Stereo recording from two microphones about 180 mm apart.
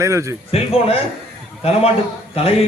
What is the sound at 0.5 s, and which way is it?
Speech, 30° left (ahead or behind).